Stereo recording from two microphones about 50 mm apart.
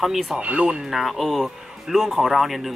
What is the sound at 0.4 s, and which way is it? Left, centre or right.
Speech, right.